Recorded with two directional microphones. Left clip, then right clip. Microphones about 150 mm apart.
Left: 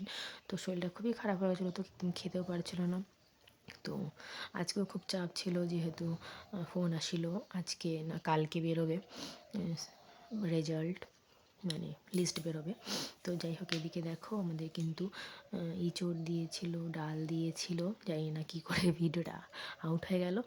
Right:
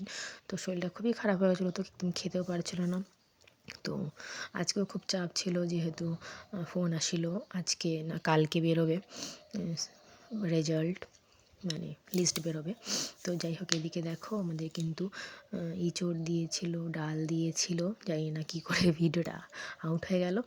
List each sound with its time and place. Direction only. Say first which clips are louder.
0.0 s speech: right 2 dB; 10° right (ahead or behind)
9.1 s speech: right 3 dB; 10° right (ahead or behind)
12.8 s speech: right 5 dB; 5° right (ahead or behind)
13.2 s speech: right 6 dB; 20° right (ahead or behind)